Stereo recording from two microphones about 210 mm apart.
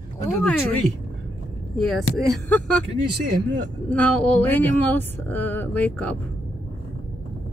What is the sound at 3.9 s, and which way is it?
Speech, 5° left (ahead or behind).